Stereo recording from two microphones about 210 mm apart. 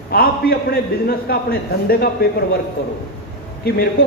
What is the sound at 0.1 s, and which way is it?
A man's voice, 45° left (ahead or behind).